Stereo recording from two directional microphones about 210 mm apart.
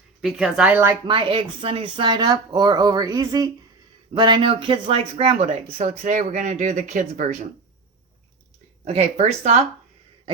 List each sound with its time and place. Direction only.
0.2 s speech: centre (ahead or behind)
1.0 s speech: 25° right (ahead or behind)
8.8 s speech: 30° right (ahead or behind)